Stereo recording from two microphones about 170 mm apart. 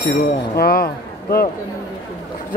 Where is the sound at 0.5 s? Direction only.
60° left (ahead or behind).